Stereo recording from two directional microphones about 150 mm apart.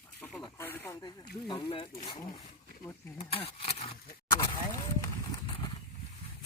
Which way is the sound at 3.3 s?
40° left (ahead or behind).